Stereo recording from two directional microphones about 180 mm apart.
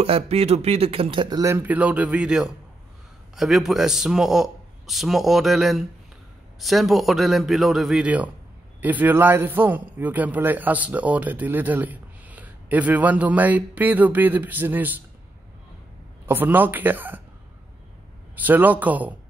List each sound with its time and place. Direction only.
0.0 s a man's voice: 35° right (ahead or behind); by 15.0 s 10° right (ahead or behind)
16.3 s a man's voice: 10° right (ahead or behind)
18.3 s a man's voice: 10° right (ahead or behind)